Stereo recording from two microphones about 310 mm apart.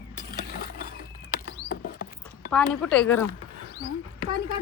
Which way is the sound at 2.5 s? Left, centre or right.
Centre.